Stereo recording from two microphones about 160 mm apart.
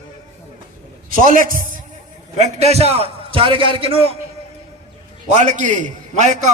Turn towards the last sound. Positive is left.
turn(degrees=-50)  # may be behind; listen again after turning